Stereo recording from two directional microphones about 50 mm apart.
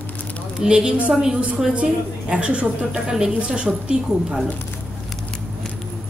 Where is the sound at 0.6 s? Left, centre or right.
Centre.